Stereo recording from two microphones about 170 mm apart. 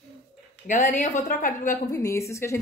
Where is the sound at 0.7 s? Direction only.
45° left (ahead or behind).